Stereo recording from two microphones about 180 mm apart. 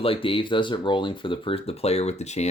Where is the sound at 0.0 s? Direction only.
30° left (ahead or behind).